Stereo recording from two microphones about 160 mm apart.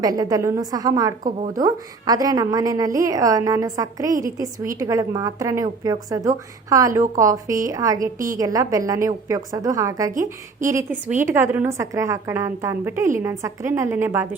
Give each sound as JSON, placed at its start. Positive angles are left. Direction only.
{"t": 0.0, "sound": "a woman's voice", "side_deg": -25}
{"t": 7.9, "sound": "a woman's voice", "side_deg": -55}
{"t": 8.3, "sound": "a woman's voice", "side_deg": -20}